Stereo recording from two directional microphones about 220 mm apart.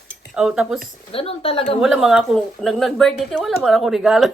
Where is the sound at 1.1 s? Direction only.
25° left (ahead or behind).